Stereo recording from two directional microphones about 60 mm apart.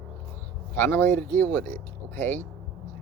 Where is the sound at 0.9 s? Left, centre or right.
Left.